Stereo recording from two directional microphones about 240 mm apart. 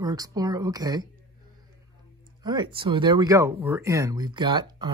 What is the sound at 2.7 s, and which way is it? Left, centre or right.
Speech, centre.